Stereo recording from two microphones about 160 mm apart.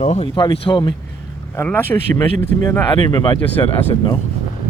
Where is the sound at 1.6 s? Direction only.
15° left (ahead or behind).